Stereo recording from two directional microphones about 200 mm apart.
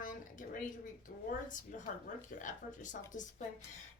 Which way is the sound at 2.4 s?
40° left (ahead or behind).